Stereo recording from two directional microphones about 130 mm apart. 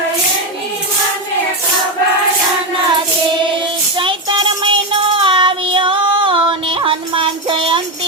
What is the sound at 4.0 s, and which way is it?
Child singing, 40° right (ahead or behind).